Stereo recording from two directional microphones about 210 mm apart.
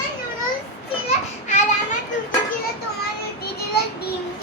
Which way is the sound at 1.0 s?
35° left (ahead or behind).